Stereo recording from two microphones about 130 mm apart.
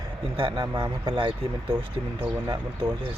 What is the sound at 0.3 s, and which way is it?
Speech, 40° right (ahead or behind).